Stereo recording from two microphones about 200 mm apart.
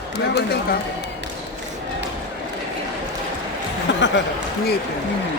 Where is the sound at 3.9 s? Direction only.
60° left (ahead or behind).